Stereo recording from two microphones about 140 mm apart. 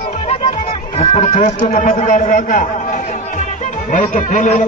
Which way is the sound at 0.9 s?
50° left (ahead or behind).